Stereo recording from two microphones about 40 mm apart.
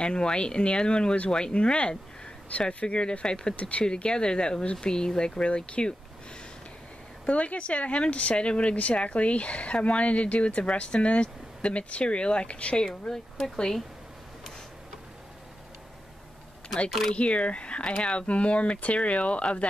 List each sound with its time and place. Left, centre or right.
0.0 s speech: left
3.5 s speech: left
3.8 s speech: left
7.2 s speech: left
12.8 s speech: centre
17.1 s speech: left